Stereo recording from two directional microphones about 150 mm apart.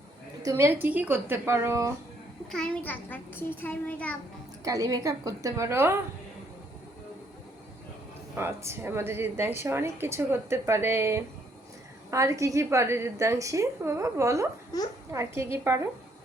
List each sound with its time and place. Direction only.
0.4 s a woman's voice: 20° right (ahead or behind)
2.5 s a child's voice: 5° left (ahead or behind)
4.6 s a woman's voice: 25° right (ahead or behind)
8.4 s a woman's voice: 15° right (ahead or behind)